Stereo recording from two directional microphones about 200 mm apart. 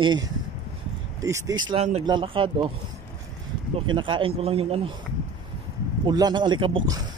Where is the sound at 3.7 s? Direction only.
25° right (ahead or behind).